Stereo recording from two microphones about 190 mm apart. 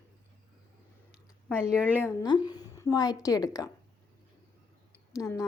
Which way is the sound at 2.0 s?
20° left (ahead or behind).